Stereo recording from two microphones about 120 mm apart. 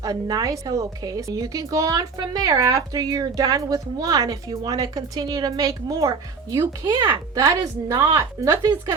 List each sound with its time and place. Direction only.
0.0 s a woman's voice: 35° right (ahead or behind)